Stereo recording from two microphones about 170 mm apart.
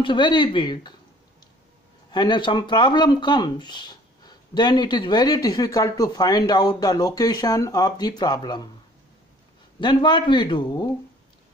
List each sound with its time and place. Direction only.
0.0 s speech: 30° left (ahead or behind)
2.0 s speech: 25° left (ahead or behind)
9.8 s speech: 25° left (ahead or behind)